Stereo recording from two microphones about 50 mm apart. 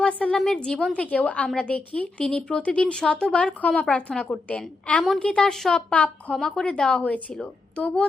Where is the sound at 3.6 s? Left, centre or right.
Left.